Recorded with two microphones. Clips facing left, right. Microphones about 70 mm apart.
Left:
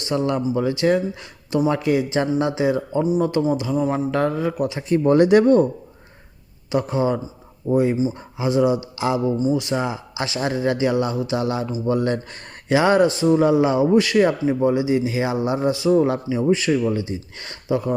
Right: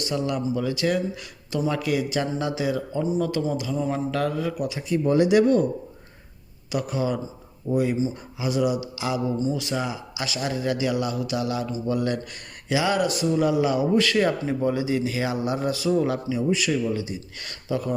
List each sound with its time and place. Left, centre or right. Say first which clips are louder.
0.0 s a man's voice: left 4 dB; left
3.0 s a man's voice: left 5 dB; centre
4.8 s speech: left 5 dB; left
6.7 s a man's voice: left 5 dB; left
9.4 s a man's voice: left 5 dB; left